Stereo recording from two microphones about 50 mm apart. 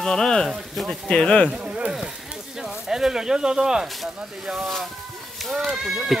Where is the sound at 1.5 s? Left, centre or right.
Right.